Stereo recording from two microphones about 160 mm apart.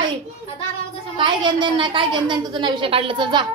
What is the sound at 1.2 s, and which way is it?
A child's voice, 30° right (ahead or behind).